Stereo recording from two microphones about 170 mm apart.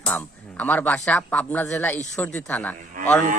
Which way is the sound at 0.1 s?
10° left (ahead or behind).